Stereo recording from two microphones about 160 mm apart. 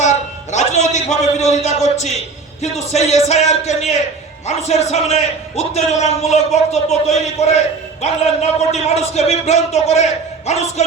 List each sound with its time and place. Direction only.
0.0 s a man's voice: 45° left (ahead or behind)